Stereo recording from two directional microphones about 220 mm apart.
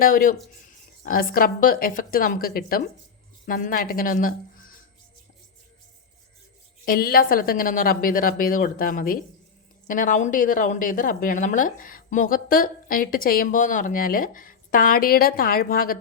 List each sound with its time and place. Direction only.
0.0 s a woman's voice: 40° left (ahead or behind)
6.8 s a woman's voice: 40° left (ahead or behind)